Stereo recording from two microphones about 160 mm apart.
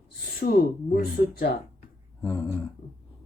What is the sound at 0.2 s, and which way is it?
Speech, 70° left (ahead or behind).